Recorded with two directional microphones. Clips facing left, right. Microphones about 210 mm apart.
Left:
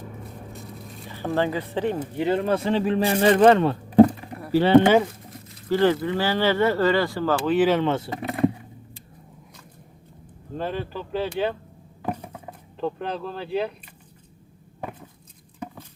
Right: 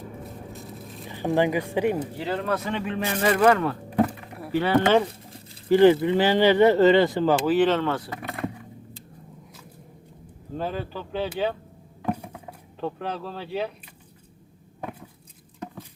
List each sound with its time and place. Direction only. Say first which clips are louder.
0.2 s a sound: right 1 dB; centre (ahead or behind)
1.0 s speech: right 2 dB; 15° right (ahead or behind)
2.1 s speech: left 5 dB; 25° left (ahead or behind)
5.6 s speech: right 4 dB; 15° right (ahead or behind)
7.4 s speech: left 3 dB; centre (ahead or behind)
7.7 s speech: left 2 dB; 20° left (ahead or behind)
10.6 s speech: left 1 dB; centre (ahead or behind)
12.1 s a sound: even; 10° right (ahead or behind)